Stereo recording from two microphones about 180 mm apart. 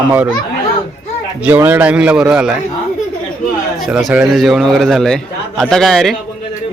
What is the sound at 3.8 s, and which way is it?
A man's voice, centre (ahead or behind).